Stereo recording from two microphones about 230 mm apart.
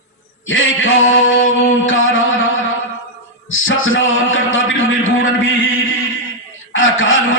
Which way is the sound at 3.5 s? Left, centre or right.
Left.